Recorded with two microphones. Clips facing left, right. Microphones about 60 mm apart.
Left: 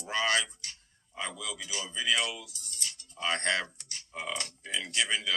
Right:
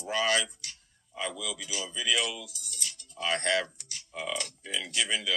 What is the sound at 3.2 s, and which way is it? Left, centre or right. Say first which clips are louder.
Speech: right 1 dB; centre.